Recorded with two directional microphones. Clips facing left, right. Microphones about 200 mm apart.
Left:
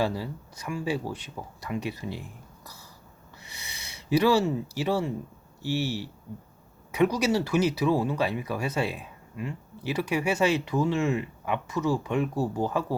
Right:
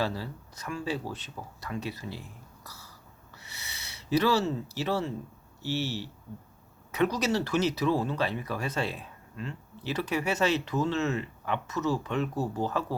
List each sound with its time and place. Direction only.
0.0 s speech: 15° left (ahead or behind)
2.6 s throat clearing: 15° left (ahead or behind)
3.3 s a sound: 15° left (ahead or behind)
5.6 s speech: 10° left (ahead or behind)